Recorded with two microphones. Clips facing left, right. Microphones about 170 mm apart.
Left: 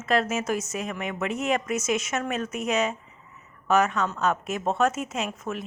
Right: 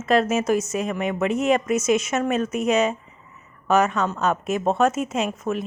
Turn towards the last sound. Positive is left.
turn(degrees=-25)  # may be behind; listen again after turning